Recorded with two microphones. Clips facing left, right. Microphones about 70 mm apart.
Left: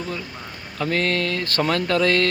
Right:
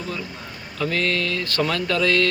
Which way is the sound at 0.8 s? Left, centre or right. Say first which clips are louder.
Left 1 dB; left.